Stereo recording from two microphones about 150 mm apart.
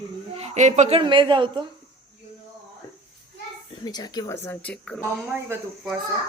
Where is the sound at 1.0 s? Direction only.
35° right (ahead or behind).